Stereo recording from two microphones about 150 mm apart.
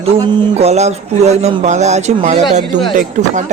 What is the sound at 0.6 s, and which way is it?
Speech, 45° right (ahead or behind).